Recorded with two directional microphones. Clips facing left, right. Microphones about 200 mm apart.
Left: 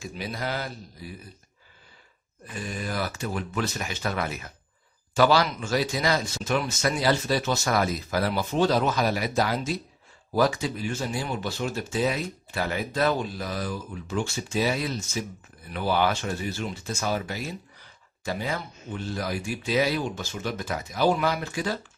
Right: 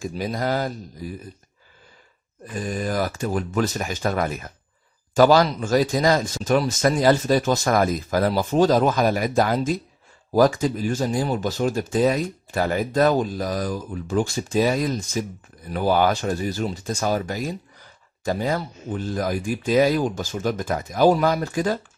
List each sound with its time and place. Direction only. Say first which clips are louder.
0.0 s speech: right 7 dB; 45° right (ahead or behind)
2.5 s speech: right 6 dB; 45° right (ahead or behind)